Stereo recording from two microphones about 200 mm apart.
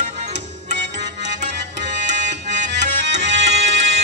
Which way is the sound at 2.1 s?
60° right (ahead or behind).